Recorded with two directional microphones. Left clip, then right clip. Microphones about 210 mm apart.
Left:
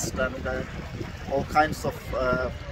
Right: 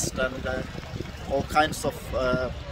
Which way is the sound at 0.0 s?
Centre (ahead or behind).